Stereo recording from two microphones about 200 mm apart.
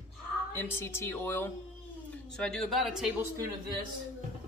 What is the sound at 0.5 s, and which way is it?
Speech, 10° left (ahead or behind).